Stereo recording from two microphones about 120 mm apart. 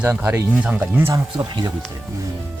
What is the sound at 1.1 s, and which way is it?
Speech, 35° right (ahead or behind).